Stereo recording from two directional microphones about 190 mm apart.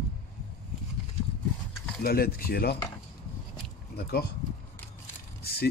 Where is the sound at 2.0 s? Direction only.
55° left (ahead or behind).